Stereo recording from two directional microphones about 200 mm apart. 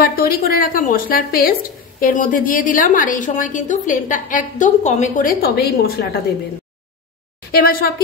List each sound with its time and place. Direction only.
0.0 s speech: 45° left (ahead or behind)
7.5 s speech: 50° left (ahead or behind)